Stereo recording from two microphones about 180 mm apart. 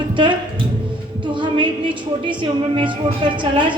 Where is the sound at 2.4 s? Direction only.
25° right (ahead or behind).